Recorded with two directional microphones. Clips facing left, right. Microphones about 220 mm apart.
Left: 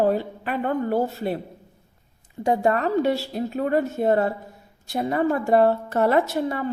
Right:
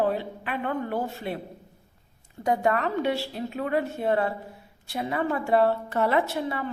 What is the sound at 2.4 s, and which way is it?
A woman's voice, 35° left (ahead or behind).